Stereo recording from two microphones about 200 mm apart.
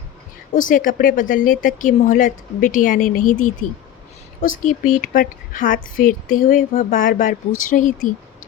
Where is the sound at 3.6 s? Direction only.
90° left.